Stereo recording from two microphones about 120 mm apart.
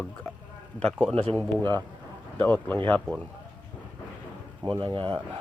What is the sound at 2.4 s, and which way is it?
Speech, 10° left (ahead or behind).